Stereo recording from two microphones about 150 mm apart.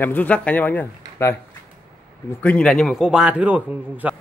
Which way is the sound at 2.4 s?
10° left (ahead or behind).